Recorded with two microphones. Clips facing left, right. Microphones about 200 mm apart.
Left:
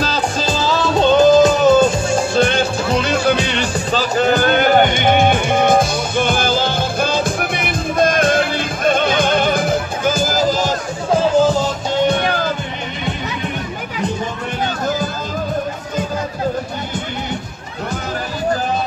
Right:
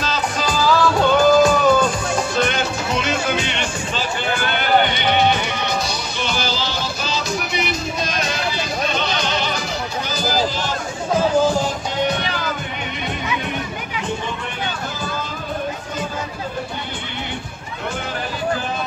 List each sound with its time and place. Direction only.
0.0 s music: 30° left (ahead or behind)